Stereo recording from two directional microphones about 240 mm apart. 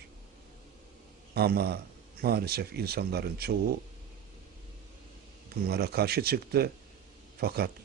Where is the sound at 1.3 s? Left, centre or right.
Right.